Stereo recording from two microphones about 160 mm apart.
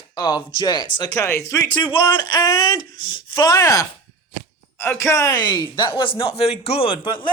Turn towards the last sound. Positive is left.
turn(degrees=30)  # may be behind; listen again after turning